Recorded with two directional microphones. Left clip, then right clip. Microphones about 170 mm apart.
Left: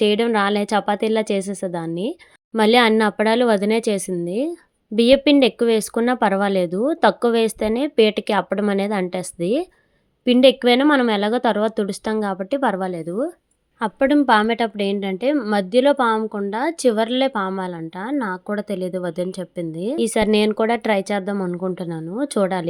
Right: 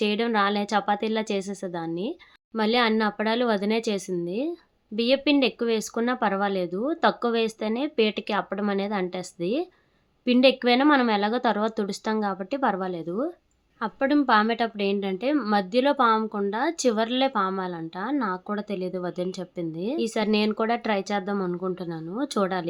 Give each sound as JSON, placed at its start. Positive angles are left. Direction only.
{"t": 0.0, "sound": "speech", "side_deg": 40}
{"t": 13.7, "sound": "a woman's voice", "side_deg": 40}
{"t": 20.0, "sound": "speech", "side_deg": 40}